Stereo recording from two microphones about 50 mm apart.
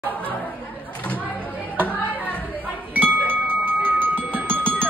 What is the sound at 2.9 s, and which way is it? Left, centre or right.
Music, right.